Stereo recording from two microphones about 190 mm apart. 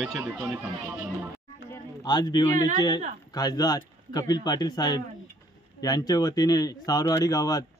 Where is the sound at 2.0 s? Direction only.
20° left (ahead or behind).